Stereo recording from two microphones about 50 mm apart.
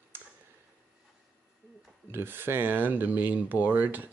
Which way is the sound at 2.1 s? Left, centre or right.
Right.